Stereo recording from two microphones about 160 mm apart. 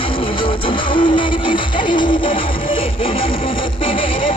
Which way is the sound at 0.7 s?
30° left (ahead or behind).